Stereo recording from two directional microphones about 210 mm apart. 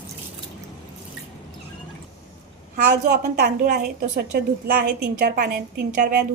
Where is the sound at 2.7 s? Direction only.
45° right (ahead or behind).